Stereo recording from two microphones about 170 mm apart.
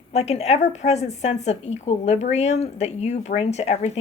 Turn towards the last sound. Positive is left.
turn(degrees=40)  # may be behind; listen again after turning